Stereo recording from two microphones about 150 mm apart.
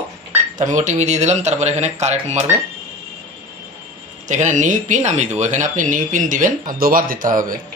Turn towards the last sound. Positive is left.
turn(degrees=-65)  # may be behind; listen again after turning